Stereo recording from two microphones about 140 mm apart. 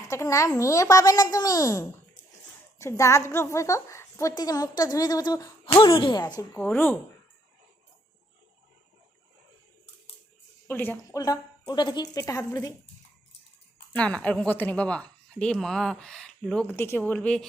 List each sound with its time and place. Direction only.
0.1 s a woman's voice: 20° left (ahead or behind)
6.6 s a woman's voice: 15° left (ahead or behind)
10.7 s a woman's voice: 15° left (ahead or behind)
13.9 s a woman's voice: 10° left (ahead or behind)